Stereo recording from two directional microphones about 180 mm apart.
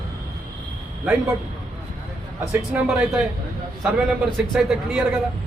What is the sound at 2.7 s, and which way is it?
A man's voice, 5° right (ahead or behind).